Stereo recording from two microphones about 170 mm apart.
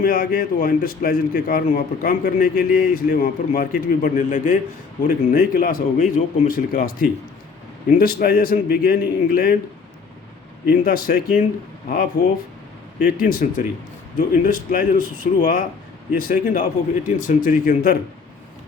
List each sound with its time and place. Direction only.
0.0 s a man's voice: 55° left (ahead or behind)
10.7 s a man's voice: 60° left (ahead or behind)
13.0 s a man's voice: 55° left (ahead or behind)